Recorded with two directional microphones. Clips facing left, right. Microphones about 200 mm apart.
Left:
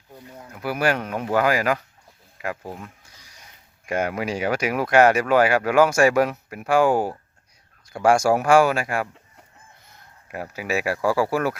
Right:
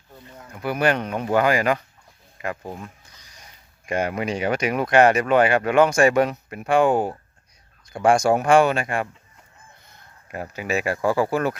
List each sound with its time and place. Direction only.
0.1 s speech: 10° left (ahead or behind)
10.3 s speech: 5° left (ahead or behind)